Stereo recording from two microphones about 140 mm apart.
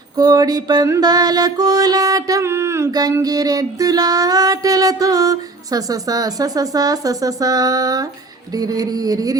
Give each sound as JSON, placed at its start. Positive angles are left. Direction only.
{"t": 0.2, "sound": "mantra", "side_deg": -30}